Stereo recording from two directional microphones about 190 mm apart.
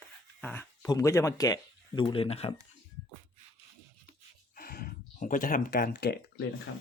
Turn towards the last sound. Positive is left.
turn(degrees=70)  # may be behind; listen again after turning